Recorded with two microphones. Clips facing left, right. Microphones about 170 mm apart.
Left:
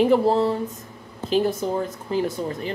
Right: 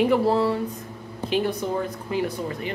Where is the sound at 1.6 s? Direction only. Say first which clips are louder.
Left 1 dB; 35° left (ahead or behind).